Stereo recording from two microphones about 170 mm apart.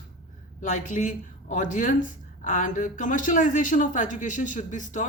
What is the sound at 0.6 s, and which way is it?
Speech, 45° left (ahead or behind).